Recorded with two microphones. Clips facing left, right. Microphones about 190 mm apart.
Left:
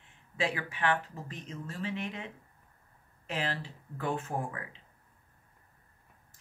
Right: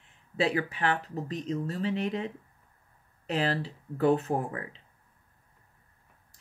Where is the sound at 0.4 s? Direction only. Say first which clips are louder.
Right 5 dB; 35° right (ahead or behind).